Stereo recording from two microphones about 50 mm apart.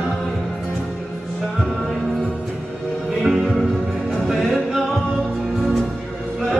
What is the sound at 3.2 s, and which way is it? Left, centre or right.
Music, centre.